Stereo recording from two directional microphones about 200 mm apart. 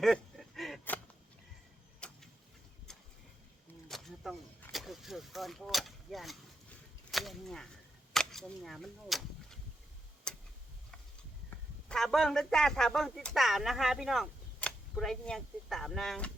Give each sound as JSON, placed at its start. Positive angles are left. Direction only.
{"t": 0.0, "sound": "a sound", "side_deg": 0}
{"t": 2.0, "sound": "vehicle", "side_deg": 5}
{"t": 3.8, "sound": "a sound", "side_deg": 0}
{"t": 4.6, "sound": "speech", "side_deg": 0}
{"t": 10.3, "sound": "tick-tock", "side_deg": 5}
{"t": 11.9, "sound": "speech", "side_deg": 0}